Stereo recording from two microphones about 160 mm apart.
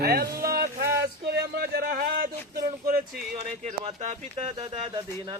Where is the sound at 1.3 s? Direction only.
90° right; by 3.0 s 65° right (ahead or behind).